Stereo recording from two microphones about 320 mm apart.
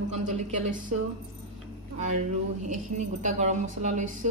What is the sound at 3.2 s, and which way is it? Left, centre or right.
Speech, right.